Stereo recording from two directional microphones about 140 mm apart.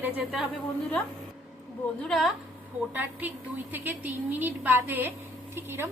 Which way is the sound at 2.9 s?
15° right (ahead or behind).